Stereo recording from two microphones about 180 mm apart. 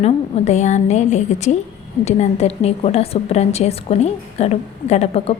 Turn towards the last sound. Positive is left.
turn(degrees=35)  # may be behind; listen again after turning